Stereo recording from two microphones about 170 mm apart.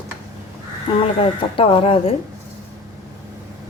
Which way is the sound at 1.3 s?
30° left (ahead or behind).